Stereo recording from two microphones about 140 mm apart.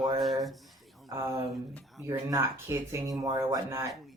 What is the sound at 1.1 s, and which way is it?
Speech, 20° right (ahead or behind).